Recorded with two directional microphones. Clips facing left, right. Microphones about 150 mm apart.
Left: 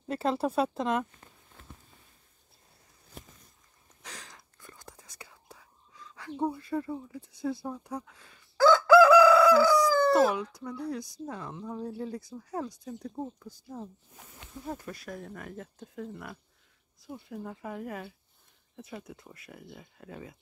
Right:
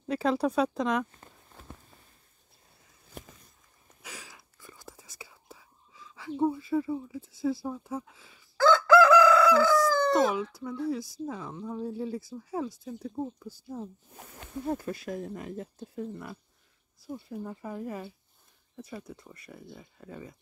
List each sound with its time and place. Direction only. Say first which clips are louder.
0.1 s speech: right 2 dB; centre (ahead or behind)
4.0 s whispering: right 1 dB; 10° right (ahead or behind)
8.5 s chicken: left 2 dB; 10° left (ahead or behind)
9.8 s speech: left 1 dB; centre (ahead or behind)
14.1 s snake: right 7 dB; 55° right (ahead or behind)
14.9 s speech: right 6 dB; 25° right (ahead or behind)
17.3 s speech: even; centre (ahead or behind)